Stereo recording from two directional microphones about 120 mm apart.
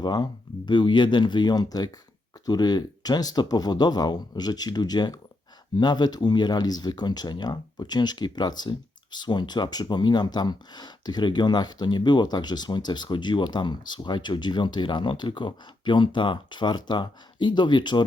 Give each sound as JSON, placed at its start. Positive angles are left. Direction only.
{"t": 0.0, "sound": "speech", "side_deg": 35}